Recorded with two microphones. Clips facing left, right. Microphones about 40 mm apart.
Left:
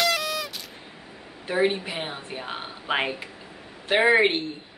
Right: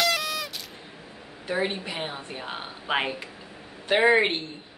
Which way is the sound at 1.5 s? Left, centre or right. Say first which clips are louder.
Left 4 dB; centre.